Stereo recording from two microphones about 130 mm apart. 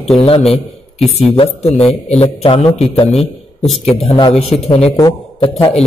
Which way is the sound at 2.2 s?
50° left (ahead or behind).